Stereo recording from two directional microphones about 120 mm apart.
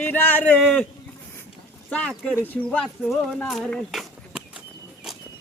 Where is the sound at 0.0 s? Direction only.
15° left (ahead or behind).